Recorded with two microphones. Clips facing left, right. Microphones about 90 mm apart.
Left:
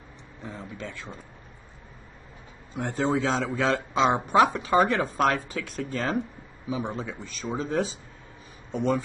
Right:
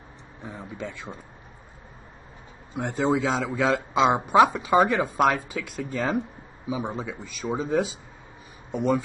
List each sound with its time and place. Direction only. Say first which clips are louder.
0.4 s speech: right 2 dB; 15° right (ahead or behind)
2.7 s a man's voice: right 2 dB; 15° right (ahead or behind)